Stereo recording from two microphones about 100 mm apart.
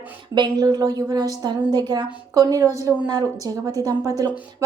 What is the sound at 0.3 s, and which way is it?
A woman's voice, 45° right (ahead or behind).